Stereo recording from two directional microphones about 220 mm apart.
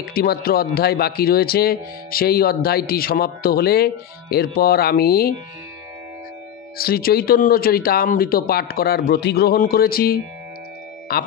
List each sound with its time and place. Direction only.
0.0 s speech: 45° left (ahead or behind)
6.8 s speech: 45° left (ahead or behind)